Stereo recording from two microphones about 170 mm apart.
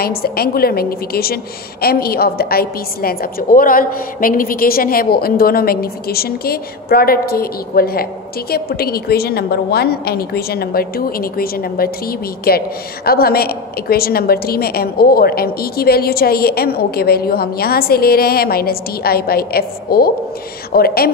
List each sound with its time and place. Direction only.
0.0 s a woman's voice: 65° left (ahead or behind)